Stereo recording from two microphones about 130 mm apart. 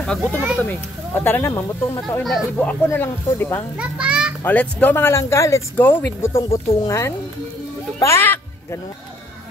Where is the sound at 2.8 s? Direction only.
15° left (ahead or behind).